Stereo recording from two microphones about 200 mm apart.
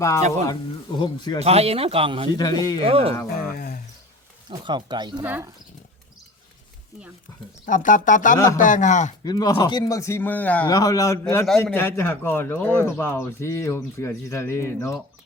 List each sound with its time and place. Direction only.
0.0 s speech: 15° left (ahead or behind)
1.4 s speech: 30° right (ahead or behind)
2.3 s speech: 20° left (ahead or behind)
2.8 s speech: 30° right (ahead or behind)
3.2 s speech: 45° left (ahead or behind)
4.4 s speech: 20° right (ahead or behind)
5.2 s speech: 10° right (ahead or behind)
7.6 s speech: 40° left (ahead or behind)
9.2 s speech: 20° left (ahead or behind)
10.7 s speech: 20° left (ahead or behind)